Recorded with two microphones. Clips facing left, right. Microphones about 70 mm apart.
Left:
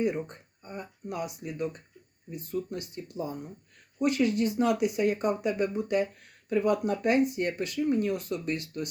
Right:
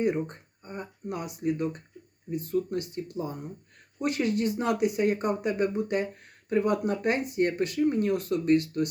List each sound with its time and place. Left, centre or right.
0.0 s speech: right